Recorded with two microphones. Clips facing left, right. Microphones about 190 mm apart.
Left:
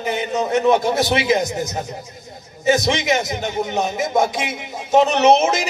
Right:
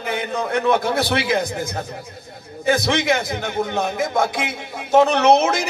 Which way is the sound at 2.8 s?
20° left (ahead or behind).